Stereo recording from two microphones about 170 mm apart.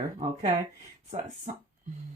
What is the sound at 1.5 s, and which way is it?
Speech, 40° right (ahead or behind).